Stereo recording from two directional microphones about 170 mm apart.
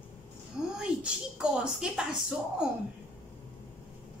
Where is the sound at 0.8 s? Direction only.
5° right (ahead or behind).